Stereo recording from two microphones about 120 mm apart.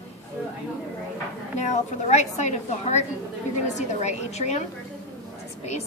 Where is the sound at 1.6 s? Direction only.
75° left (ahead or behind).